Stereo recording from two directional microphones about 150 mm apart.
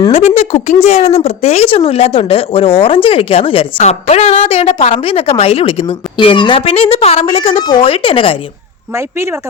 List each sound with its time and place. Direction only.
0.1 s a woman's voice: 45° left (ahead or behind)
3.8 s a woman's voice: 45° left (ahead or behind)
7.6 s a woman's voice: 30° left (ahead or behind)
9.0 s speech: 15° right (ahead or behind)